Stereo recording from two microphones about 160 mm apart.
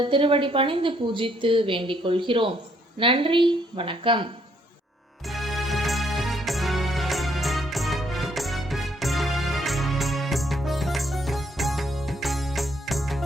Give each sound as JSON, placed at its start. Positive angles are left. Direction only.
{"t": 0.0, "sound": "a woman's voice", "side_deg": -30}
{"t": 5.3, "sound": "music", "side_deg": 0}